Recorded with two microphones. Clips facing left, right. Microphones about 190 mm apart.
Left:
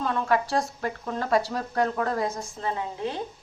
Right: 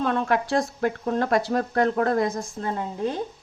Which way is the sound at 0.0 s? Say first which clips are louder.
Right 2 dB; 60° right (ahead or behind).